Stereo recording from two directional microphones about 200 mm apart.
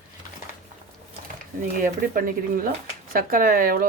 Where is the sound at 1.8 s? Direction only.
45° right (ahead or behind).